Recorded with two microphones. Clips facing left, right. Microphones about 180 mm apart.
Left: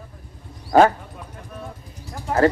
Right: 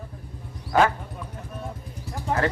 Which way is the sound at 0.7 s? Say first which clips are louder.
Left 6 dB; 35° left (ahead or behind).